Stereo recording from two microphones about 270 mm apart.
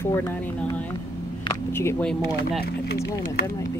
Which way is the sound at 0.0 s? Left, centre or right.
Centre.